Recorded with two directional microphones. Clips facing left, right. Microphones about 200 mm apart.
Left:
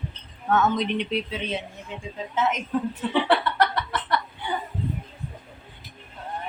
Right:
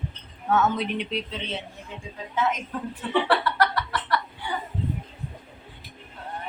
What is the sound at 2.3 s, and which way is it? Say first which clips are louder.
Speech: left 1 dB; 20° left (ahead or behind).